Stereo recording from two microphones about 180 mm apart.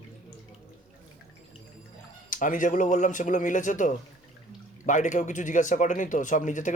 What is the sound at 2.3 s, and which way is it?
Speech, 45° left (ahead or behind).